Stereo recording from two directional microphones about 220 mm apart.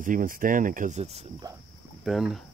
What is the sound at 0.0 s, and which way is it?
Speech, 40° right (ahead or behind).